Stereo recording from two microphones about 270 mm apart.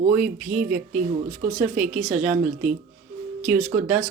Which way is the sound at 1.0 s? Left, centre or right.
Right.